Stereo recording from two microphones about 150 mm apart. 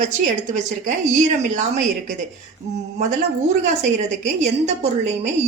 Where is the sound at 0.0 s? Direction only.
55° right (ahead or behind).